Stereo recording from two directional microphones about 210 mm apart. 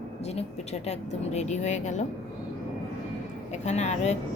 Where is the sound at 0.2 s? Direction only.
30° left (ahead or behind).